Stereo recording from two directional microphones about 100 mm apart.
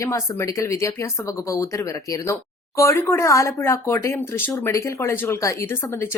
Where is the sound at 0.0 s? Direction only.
30° left (ahead or behind).